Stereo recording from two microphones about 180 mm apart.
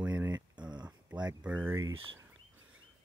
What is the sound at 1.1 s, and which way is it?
Speech, 5° right (ahead or behind).